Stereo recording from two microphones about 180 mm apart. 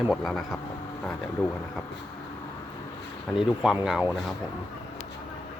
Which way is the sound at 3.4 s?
5° right (ahead or behind).